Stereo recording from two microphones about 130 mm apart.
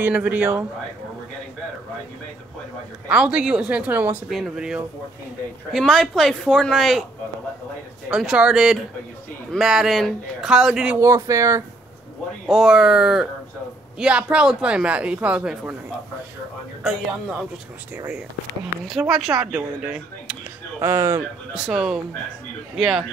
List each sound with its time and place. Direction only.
0.0 s speech: 15° right (ahead or behind)
3.1 s speech: 10° right (ahead or behind)
4.3 s a man's voice: 5° right (ahead or behind)
8.1 s a man's voice: 5° right (ahead or behind)
11.0 s speech: 25° right (ahead or behind)
12.4 s a man's voice: centre (ahead or behind)
16.8 s a man's voice: 5° right (ahead or behind)
18.9 s a man's voice: centre (ahead or behind)
20.8 s speech: 20° right (ahead or behind)
21.6 s a man's voice: 5° right (ahead or behind)